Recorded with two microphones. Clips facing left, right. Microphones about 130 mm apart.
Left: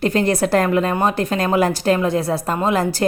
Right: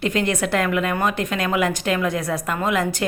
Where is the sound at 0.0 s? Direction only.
35° left (ahead or behind).